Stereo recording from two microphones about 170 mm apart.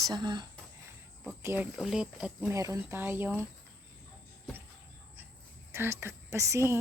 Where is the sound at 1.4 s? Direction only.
10° right (ahead or behind).